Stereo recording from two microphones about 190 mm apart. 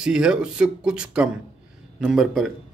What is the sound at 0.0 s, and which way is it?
Speech, 5° right (ahead or behind).